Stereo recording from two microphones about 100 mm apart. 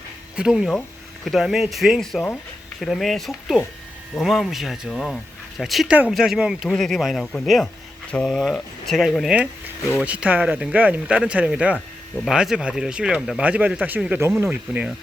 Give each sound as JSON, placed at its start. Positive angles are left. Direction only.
{"t": 0.3, "sound": "speech", "side_deg": -5}
{"t": 6.7, "sound": "speech", "side_deg": 5}
{"t": 10.0, "sound": "speech", "side_deg": -15}